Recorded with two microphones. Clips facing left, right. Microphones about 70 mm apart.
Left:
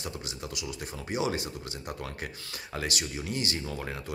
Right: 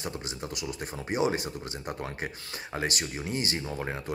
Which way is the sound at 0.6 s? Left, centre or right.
Right.